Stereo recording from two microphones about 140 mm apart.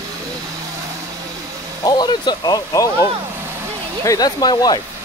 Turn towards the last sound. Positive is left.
turn(degrees=30)  # may be behind; listen again after turning